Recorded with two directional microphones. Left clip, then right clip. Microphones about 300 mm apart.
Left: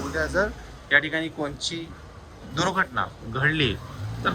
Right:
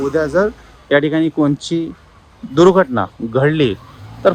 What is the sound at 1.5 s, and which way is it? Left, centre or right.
Speech, centre.